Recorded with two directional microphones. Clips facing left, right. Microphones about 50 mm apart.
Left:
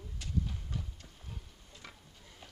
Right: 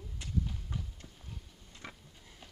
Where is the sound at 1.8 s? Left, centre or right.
Right.